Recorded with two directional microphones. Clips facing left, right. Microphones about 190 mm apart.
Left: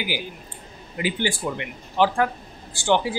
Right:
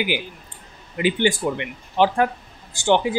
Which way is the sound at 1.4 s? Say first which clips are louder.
Right 4 dB; 20° right (ahead or behind).